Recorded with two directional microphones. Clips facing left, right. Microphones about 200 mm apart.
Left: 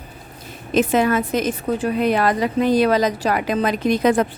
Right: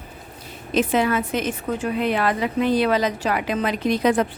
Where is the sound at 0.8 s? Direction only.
45° left (ahead or behind).